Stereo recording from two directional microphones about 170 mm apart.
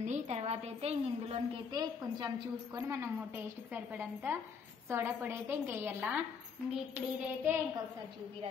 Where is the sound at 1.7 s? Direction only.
25° right (ahead or behind).